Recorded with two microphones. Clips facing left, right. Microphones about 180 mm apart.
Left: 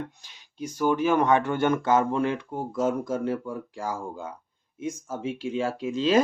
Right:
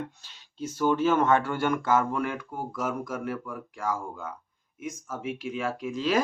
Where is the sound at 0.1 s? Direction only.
15° left (ahead or behind).